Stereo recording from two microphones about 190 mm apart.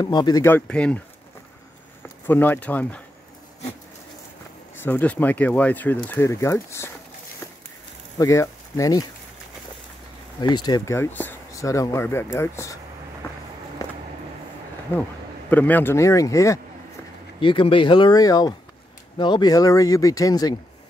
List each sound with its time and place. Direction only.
0.0 s speech: 20° left (ahead or behind)
2.2 s speech: 10° left (ahead or behind)
4.8 s speech: 10° left (ahead or behind)
8.2 s speech: 15° left (ahead or behind)
10.4 s speech: 20° left (ahead or behind)
14.9 s speech: 10° left (ahead or behind)
17.4 s speech: 25° left (ahead or behind)